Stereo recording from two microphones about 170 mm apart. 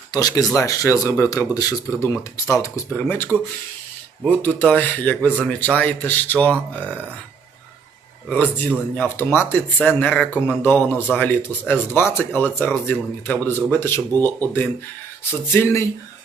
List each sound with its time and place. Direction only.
0.1 s speech: 20° left (ahead or behind)
4.3 s speech: 10° left (ahead or behind)
8.3 s speech: 10° left (ahead or behind)